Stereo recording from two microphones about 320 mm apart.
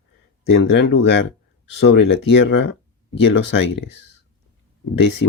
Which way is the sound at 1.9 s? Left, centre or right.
Left.